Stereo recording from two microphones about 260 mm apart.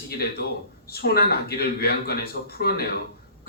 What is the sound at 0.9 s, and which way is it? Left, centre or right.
A man's voice, left.